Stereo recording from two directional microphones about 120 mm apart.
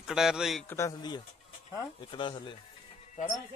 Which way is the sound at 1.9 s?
40° left (ahead or behind).